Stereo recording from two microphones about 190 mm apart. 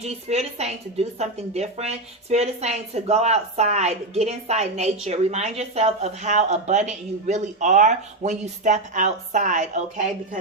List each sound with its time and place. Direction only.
0.0 s a woman's voice: 35° right (ahead or behind)